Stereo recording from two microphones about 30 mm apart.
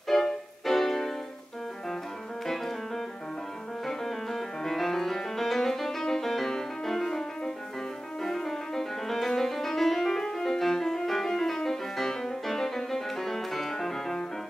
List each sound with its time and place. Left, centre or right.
0.1 s music: centre
2.4 s music: centre
3.8 s music: centre